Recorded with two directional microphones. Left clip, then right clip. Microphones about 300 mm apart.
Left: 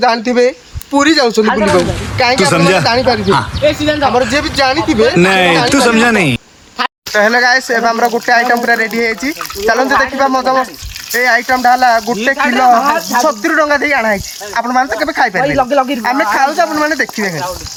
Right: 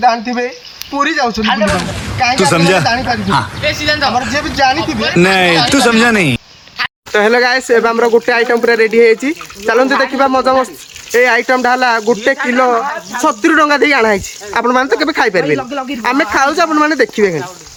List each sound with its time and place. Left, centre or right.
0.0 s speech: centre
1.6 s speech: centre
3.6 s speech: left
5.1 s speech: centre
7.1 s speech: centre